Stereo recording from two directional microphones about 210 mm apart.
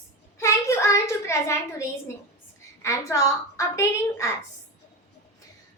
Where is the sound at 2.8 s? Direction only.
15° left (ahead or behind).